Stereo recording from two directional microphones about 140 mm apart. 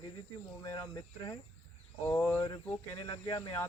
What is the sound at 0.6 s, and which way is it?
Speech, 25° left (ahead or behind).